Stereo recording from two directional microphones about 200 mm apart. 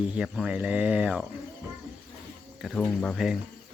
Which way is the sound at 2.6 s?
Centre (ahead or behind).